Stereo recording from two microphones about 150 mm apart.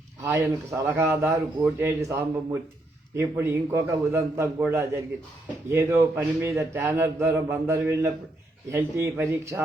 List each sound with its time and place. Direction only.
0.2 s a man's voice: 20° right (ahead or behind)